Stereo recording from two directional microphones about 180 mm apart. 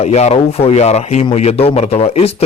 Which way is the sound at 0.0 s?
35° left (ahead or behind).